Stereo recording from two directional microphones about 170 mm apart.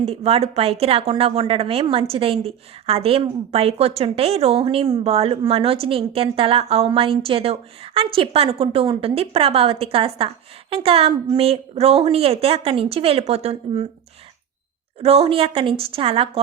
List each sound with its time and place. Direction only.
0.0 s a woman's voice: 35° right (ahead or behind)
15.0 s a woman's voice: 35° right (ahead or behind)